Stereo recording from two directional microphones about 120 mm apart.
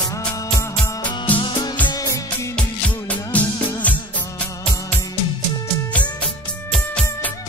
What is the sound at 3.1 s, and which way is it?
Music, 10° left (ahead or behind).